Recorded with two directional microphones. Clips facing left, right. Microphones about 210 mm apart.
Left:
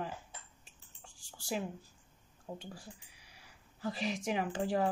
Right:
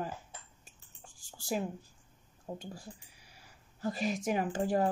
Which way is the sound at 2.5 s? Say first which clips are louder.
Right 3 dB; 35° right (ahead or behind).